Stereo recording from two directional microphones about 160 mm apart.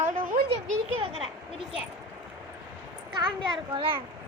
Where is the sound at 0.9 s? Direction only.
35° right (ahead or behind).